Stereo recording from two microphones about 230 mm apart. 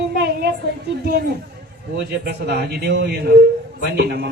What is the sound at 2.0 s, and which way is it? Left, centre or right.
A man's voice, right.